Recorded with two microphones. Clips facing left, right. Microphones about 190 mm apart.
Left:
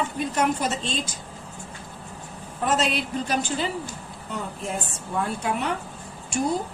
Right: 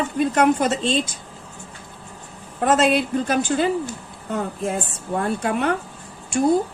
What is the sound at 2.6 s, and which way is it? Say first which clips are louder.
A woman's voice: right 7 dB; 55° right (ahead or behind).